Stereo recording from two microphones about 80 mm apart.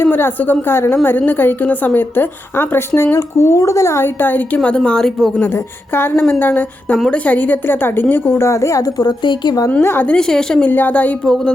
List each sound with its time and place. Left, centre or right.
0.0 s a woman's voice: left; by 5.3 s centre
5.9 s a woman's voice: left
9.0 s a woman's voice: left
9.8 s a woman's voice: left
10.1 s a woman's voice: centre
10.7 s a woman's voice: left